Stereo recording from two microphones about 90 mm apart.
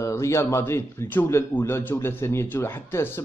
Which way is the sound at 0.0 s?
35° left (ahead or behind).